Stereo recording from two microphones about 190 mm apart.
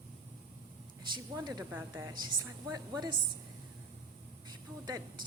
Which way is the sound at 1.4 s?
20° right (ahead or behind).